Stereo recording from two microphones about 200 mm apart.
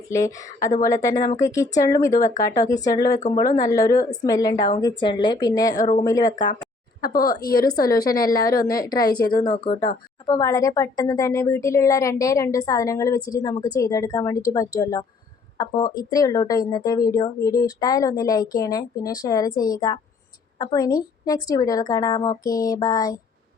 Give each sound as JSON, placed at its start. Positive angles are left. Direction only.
{"t": 0.1, "sound": "a woman's voice", "side_deg": 15}
{"t": 5.8, "sound": "speech", "side_deg": 35}
{"t": 6.1, "sound": "a woman's voice", "side_deg": 20}
{"t": 7.0, "sound": "speech", "side_deg": 45}
{"t": 7.7, "sound": "a woman's voice", "side_deg": 20}
{"t": 9.5, "sound": "speech", "side_deg": 45}
{"t": 10.2, "sound": "a woman's voice", "side_deg": 20}